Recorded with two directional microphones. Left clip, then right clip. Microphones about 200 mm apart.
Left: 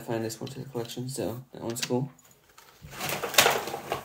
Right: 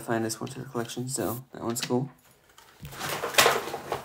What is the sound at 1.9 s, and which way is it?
Speech, 20° right (ahead or behind).